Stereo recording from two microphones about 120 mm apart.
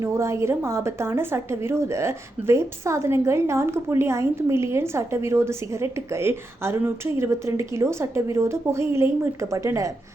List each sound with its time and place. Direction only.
0.0 s a woman's voice: 25° right (ahead or behind)